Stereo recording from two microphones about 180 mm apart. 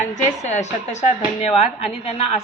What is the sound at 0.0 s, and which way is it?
Speech, 40° left (ahead or behind).